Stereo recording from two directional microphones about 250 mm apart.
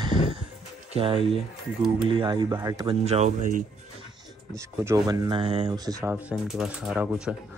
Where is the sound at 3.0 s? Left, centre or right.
Right.